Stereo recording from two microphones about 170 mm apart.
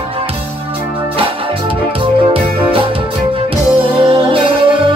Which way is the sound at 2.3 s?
30° right (ahead or behind).